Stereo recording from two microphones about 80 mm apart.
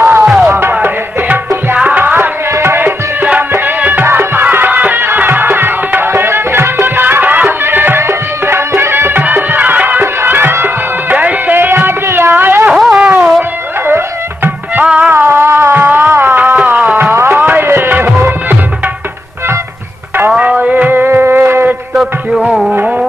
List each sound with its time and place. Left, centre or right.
0.0 s music: right
12.7 s a sound: centre
14.8 s music: centre
15.1 s music: right
20.4 s a sound: centre
22.7 s music: centre